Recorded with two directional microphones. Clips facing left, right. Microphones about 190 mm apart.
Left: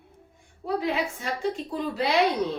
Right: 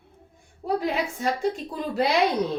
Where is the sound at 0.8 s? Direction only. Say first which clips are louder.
Right 1 dB; 40° right (ahead or behind).